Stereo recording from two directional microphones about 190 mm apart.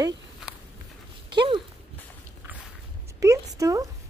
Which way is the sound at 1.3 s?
25° right (ahead or behind).